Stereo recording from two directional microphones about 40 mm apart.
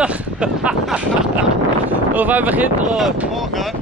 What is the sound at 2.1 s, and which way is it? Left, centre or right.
Speech, right.